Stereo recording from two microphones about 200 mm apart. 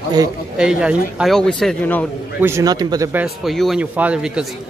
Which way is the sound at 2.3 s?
10° right (ahead or behind).